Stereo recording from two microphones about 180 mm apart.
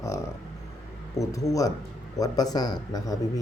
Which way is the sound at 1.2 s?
20° left (ahead or behind).